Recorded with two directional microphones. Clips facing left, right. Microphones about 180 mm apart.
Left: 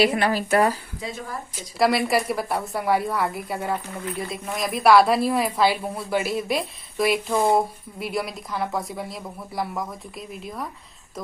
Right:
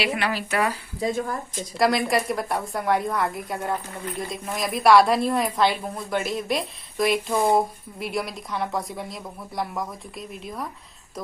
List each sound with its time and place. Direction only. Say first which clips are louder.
0.0 s speech: left 5 dB; 40° left (ahead or behind)
0.9 s speech: right 7 dB; 45° right (ahead or behind)
1.8 s a woman's voice: left 1 dB; 5° left (ahead or behind)